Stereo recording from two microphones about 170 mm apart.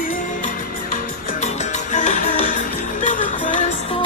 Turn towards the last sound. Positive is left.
turn(degrees=45)  # may be behind; listen again after turning